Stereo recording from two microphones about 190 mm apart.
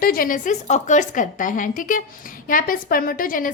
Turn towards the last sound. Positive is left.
turn(degrees=45)  # may be behind; listen again after turning